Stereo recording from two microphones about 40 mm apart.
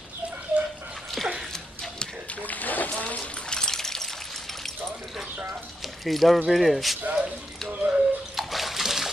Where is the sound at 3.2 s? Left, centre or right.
Left; by 4.7 s centre.